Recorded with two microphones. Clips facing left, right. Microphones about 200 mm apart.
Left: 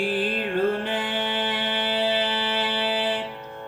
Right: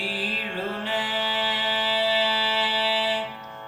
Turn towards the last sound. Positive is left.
turn(degrees=55)  # may be behind; listen again after turning